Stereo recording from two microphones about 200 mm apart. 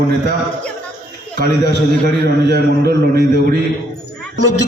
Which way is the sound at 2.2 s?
55° right (ahead or behind).